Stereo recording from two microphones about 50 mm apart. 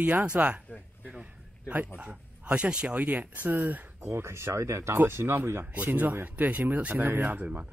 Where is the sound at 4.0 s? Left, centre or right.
Right.